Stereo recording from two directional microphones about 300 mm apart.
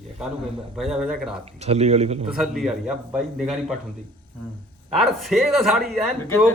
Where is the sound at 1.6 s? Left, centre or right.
Right.